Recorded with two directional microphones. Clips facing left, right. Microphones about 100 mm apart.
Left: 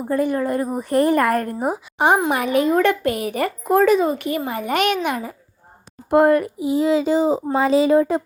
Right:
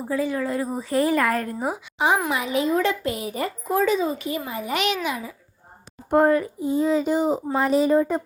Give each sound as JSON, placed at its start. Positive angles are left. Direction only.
{"t": 0.1, "sound": "a woman's voice", "side_deg": 55}
{"t": 6.1, "sound": "a child's voice", "side_deg": 70}